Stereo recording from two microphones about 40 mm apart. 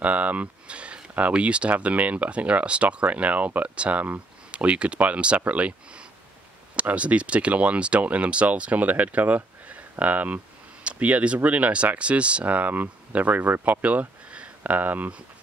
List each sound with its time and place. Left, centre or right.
0.0 s speech: right
14.6 s speech: right